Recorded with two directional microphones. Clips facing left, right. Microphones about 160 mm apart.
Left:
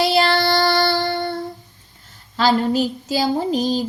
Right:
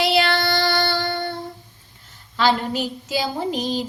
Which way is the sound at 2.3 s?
35° left (ahead or behind).